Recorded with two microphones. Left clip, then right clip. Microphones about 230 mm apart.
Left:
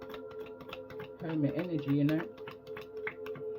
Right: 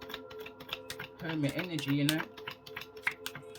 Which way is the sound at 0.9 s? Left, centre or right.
Right.